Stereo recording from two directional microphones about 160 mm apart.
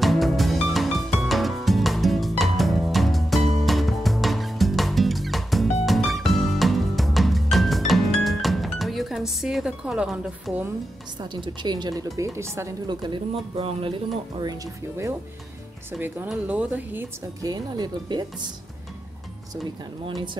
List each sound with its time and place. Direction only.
0.0 s music: centre (ahead or behind)
11.1 s speech: 30° right (ahead or behind)
12.8 s speech: 30° right (ahead or behind)
14.4 s speech: 20° right (ahead or behind)
16.3 s speech: 10° right (ahead or behind); by 18.5 s 25° right (ahead or behind)